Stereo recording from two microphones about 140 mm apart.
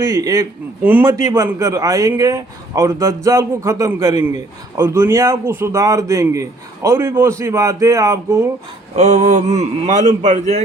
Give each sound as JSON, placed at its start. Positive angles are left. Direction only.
{"t": 0.0, "sound": "a man's voice", "side_deg": -25}
{"t": 0.8, "sound": "a man's voice", "side_deg": -10}
{"t": 9.0, "sound": "speech", "side_deg": -55}